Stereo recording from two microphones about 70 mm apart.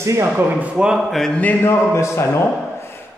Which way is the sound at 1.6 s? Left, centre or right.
Left.